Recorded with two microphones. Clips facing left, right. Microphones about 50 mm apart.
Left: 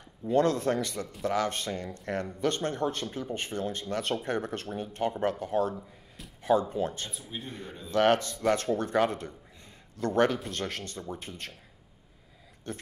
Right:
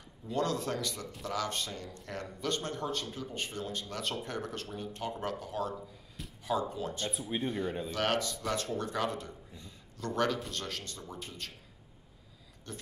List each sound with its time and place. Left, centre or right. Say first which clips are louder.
0.3 s speech: left 7 dB; left
7.1 s speech: right 5 dB; right
7.4 s speech: right 8 dB; right
7.9 s speech: left 11 dB; left
12.7 s speech: left 6 dB; left